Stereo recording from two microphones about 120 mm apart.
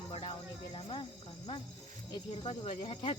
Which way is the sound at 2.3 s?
55° left (ahead or behind).